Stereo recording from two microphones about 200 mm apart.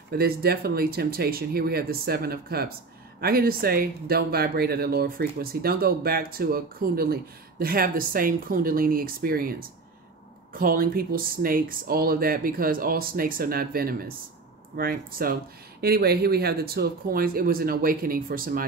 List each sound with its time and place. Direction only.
0.1 s speech: 50° right (ahead or behind)